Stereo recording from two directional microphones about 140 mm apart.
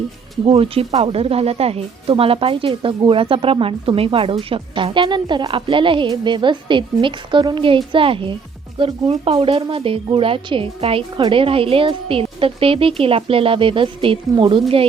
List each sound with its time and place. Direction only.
0.4 s a woman's voice: 40° right (ahead or behind)